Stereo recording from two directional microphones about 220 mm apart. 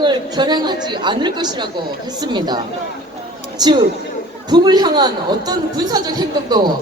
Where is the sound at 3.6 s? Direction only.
20° right (ahead or behind).